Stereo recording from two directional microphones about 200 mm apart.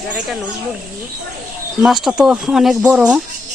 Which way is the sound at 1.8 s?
Centre (ahead or behind).